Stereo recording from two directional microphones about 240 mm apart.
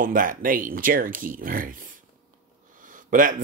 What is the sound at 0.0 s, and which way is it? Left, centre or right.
Speech, right.